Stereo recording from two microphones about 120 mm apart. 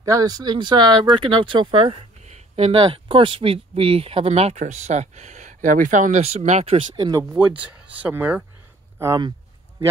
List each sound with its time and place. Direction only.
0.0 s speech: 30° right (ahead or behind); by 2.7 s 65° right (ahead or behind)
2.8 s speech: 45° right (ahead or behind)
7.3 s speech: 10° right (ahead or behind)
8.9 s speech: 25° right (ahead or behind)